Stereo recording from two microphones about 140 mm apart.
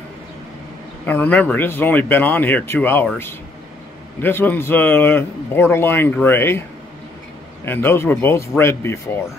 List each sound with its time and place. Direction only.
1.0 s speech: 10° left (ahead or behind)
4.2 s speech: 15° left (ahead or behind)
7.6 s speech: 15° left (ahead or behind)